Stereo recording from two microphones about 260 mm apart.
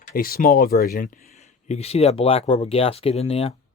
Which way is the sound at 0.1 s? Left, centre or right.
Left.